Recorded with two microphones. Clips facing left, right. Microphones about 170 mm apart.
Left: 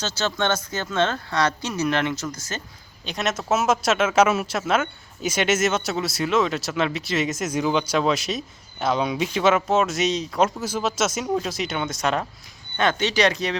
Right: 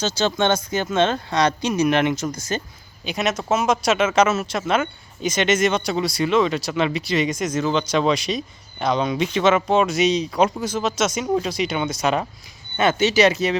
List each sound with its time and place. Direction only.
0.0 s speech: 15° right (ahead or behind)
3.0 s speech: 5° right (ahead or behind)